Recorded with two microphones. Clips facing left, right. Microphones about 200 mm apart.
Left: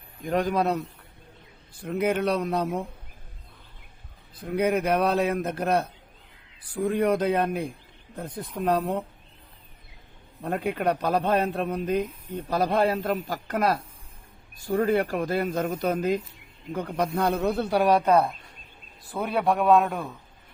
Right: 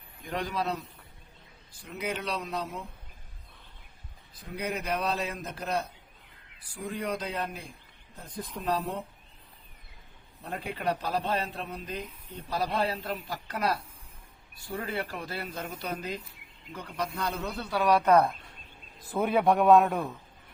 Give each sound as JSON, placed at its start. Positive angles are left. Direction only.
{"t": 0.3, "sound": "speech", "side_deg": 50}
{"t": 4.4, "sound": "a man's voice", "side_deg": 55}
{"t": 10.4, "sound": "a man's voice", "side_deg": 55}
{"t": 17.7, "sound": "speech", "side_deg": 30}
{"t": 18.0, "sound": "speech", "side_deg": 10}
{"t": 19.2, "sound": "a man's voice", "side_deg": -5}